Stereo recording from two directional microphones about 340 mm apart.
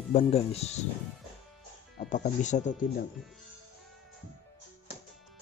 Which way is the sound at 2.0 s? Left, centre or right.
Left.